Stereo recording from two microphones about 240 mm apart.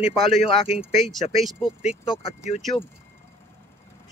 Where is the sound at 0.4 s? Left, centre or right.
Left.